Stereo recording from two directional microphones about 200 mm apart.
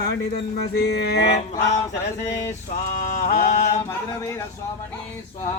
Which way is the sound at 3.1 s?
40° left (ahead or behind).